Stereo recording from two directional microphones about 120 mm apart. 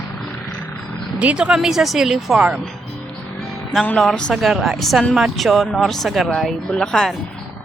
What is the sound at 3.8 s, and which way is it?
Speech, 5° left (ahead or behind).